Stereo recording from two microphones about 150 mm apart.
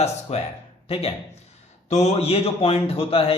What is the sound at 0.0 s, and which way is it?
A man's voice, 45° left (ahead or behind).